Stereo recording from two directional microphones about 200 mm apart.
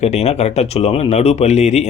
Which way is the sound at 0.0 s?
30° left (ahead or behind).